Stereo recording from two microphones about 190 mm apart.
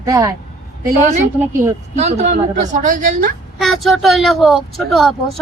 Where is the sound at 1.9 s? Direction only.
35° right (ahead or behind).